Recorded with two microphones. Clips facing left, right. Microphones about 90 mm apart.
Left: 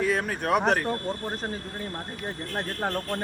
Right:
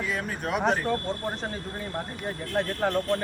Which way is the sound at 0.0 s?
60° left (ahead or behind).